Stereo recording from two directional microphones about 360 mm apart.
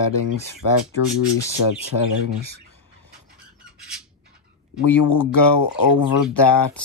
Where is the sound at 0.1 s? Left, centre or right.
Left.